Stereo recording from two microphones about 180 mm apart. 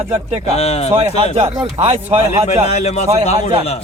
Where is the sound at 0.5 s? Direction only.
35° left (ahead or behind).